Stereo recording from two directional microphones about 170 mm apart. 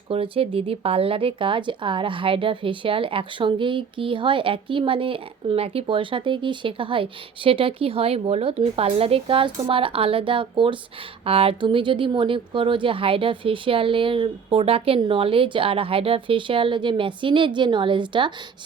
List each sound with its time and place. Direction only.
0.1 s speech: 35° right (ahead or behind)